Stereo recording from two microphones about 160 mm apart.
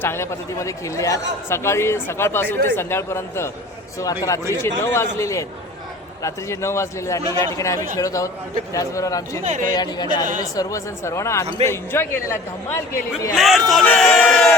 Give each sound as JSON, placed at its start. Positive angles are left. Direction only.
{"t": 0.0, "sound": "a man's voice", "side_deg": 15}
{"t": 9.4, "sound": "speech", "side_deg": -50}
{"t": 9.6, "sound": "a man's voice", "side_deg": 25}
{"t": 13.3, "sound": "speech", "side_deg": 0}